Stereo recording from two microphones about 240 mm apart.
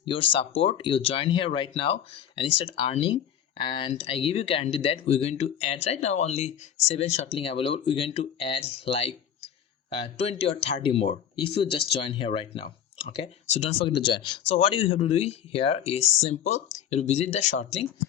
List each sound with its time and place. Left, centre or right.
0.0 s speech: left